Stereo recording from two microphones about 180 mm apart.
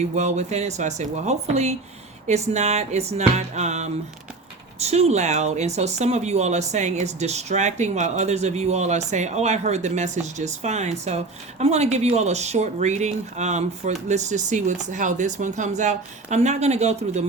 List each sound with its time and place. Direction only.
0.2 s speech: 40° right (ahead or behind)